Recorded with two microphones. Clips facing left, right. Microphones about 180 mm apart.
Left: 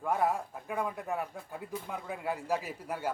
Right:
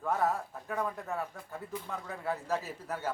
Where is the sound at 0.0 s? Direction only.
10° left (ahead or behind).